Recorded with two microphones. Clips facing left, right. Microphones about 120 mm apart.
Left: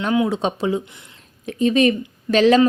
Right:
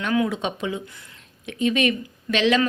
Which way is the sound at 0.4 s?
35° left (ahead or behind).